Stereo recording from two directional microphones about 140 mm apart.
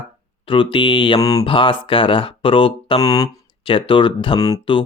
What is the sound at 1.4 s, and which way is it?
Speech, 35° left (ahead or behind).